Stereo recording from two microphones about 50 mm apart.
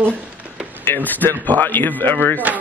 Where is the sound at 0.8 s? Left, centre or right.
Left.